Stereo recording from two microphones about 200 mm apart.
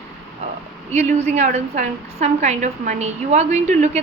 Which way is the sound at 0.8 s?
35° right (ahead or behind).